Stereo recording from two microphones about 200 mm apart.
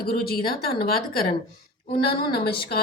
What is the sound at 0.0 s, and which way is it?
A woman's voice, 50° left (ahead or behind).